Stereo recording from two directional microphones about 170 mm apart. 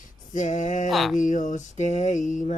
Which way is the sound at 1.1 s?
50° left (ahead or behind).